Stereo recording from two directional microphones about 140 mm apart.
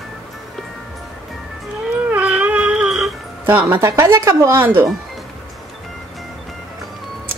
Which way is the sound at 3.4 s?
15° right (ahead or behind).